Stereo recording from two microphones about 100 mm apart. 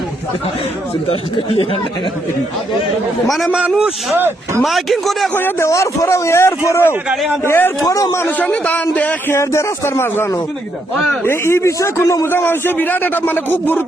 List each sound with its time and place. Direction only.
3.2 s a man's voice: centre (ahead or behind)
4.1 s speech: 25° right (ahead or behind)
4.6 s a man's voice: centre (ahead or behind)
5.3 s a man's voice: 20° left (ahead or behind)
7.9 s a man's voice: 35° left (ahead or behind)
8.4 s speech: 15° left (ahead or behind)
9.4 s a man's voice: 30° left (ahead or behind)
11.3 s a man's voice: 25° left (ahead or behind)
12.3 s a man's voice: 20° left (ahead or behind)